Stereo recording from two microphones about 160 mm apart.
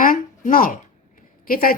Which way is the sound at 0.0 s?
60° left (ahead or behind).